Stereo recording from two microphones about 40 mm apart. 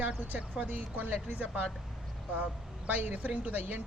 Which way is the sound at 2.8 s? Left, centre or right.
Right.